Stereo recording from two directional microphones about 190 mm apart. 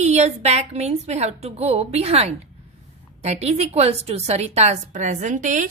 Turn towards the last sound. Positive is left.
turn(degrees=-40)  # may be behind; listen again after turning